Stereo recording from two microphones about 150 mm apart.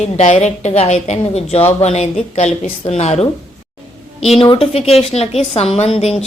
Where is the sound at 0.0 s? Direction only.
50° left (ahead or behind).